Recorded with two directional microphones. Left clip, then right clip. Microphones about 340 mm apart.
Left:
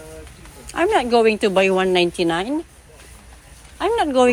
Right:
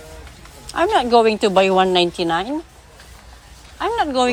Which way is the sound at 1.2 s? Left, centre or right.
Right.